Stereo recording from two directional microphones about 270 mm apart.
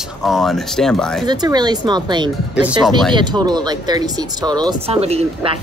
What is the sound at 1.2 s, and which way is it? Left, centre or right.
Speech, centre.